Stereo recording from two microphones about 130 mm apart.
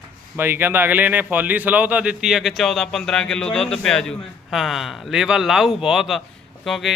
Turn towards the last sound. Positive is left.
turn(degrees=0)  # may be behind; listen again after turning